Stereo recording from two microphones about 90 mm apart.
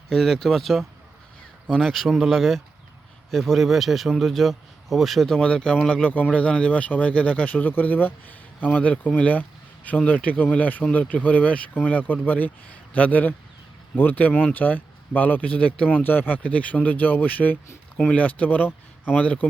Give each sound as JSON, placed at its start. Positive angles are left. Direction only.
{"t": 0.1, "sound": "a man's voice", "side_deg": 5}